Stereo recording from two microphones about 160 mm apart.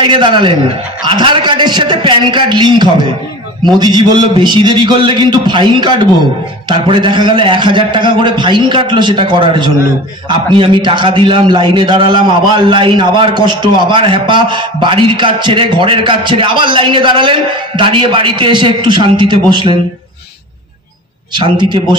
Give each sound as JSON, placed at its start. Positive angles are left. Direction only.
{"t": 0.0, "sound": "a woman's voice", "side_deg": -30}
{"t": 21.3, "sound": "a man's voice", "side_deg": -30}